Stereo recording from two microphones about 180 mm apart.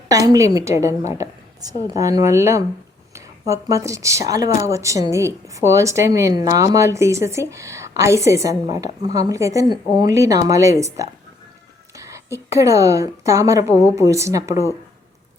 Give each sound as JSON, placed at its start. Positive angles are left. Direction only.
{"t": 0.1, "sound": "speech", "side_deg": -20}
{"t": 11.9, "sound": "a woman's voice", "side_deg": -15}